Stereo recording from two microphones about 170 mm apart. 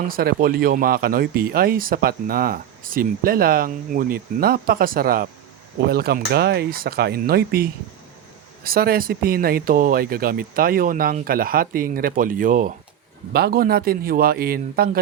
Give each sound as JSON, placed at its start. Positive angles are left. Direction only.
{"t": 0.1, "sound": "speech", "side_deg": -60}
{"t": 13.3, "sound": "speech", "side_deg": -65}